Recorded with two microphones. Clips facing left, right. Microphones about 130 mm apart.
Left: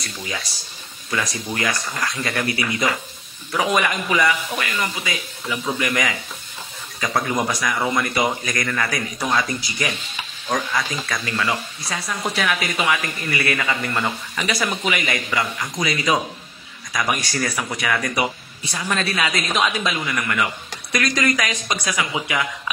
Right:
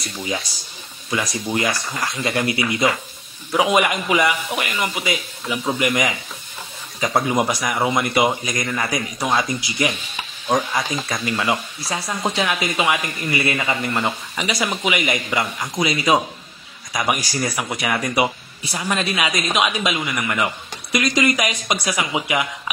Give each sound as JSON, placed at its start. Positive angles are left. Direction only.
{"t": 0.0, "sound": "speech", "side_deg": -25}